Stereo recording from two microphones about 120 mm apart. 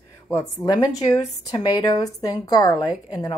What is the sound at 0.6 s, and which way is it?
A woman's voice, 35° left (ahead or behind).